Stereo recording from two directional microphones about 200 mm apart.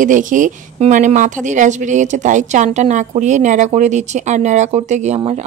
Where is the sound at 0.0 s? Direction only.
40° right (ahead or behind).